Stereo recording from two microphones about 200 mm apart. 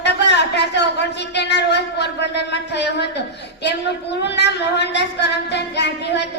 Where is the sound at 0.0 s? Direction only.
60° left (ahead or behind).